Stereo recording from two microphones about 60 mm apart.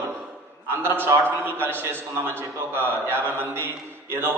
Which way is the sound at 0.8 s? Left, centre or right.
Right.